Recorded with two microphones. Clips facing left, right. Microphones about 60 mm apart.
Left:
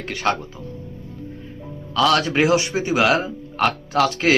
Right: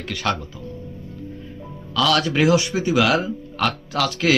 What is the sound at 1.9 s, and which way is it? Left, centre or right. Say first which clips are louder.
Speech: left 2 dB; left.